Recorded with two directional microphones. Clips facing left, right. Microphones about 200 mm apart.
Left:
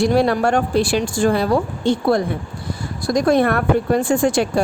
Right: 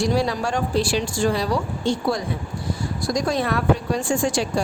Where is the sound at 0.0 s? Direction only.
60° left (ahead or behind).